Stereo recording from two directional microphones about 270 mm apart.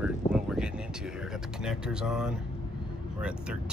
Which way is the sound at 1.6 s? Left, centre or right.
Centre.